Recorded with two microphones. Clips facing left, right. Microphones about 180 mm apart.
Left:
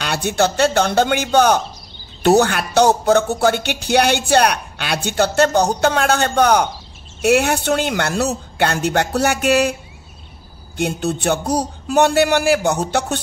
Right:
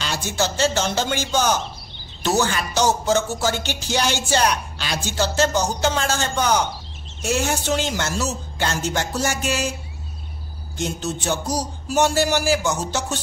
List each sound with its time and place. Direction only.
0.0 s speech: 60° left (ahead or behind)
10.8 s speech: 60° left (ahead or behind)